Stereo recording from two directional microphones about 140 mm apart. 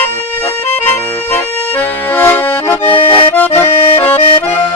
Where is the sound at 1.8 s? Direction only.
15° left (ahead or behind).